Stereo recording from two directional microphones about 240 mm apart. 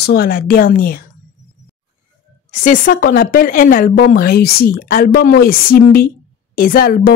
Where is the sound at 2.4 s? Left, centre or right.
Left.